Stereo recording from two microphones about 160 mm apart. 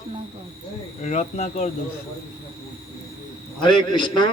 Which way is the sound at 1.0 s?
50° left (ahead or behind).